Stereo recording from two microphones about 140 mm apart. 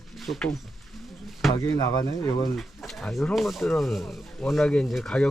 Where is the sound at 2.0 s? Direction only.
25° left (ahead or behind).